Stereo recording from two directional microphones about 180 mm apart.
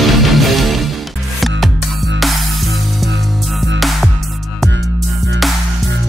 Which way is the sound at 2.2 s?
Centre (ahead or behind).